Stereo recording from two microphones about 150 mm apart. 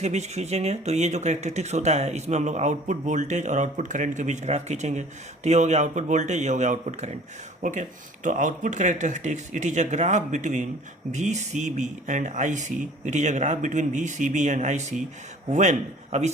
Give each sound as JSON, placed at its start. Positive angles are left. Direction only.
{"t": 0.0, "sound": "speech", "side_deg": -50}